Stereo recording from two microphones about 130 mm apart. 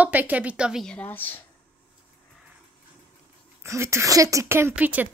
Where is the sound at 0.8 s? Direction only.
10° left (ahead or behind).